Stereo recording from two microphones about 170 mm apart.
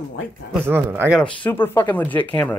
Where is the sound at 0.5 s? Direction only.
15° right (ahead or behind).